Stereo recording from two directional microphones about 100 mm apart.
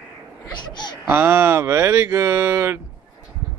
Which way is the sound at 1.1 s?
25° right (ahead or behind).